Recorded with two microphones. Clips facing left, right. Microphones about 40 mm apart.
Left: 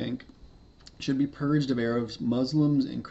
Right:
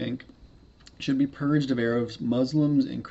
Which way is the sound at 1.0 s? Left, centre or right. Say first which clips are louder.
Right 2 dB; right.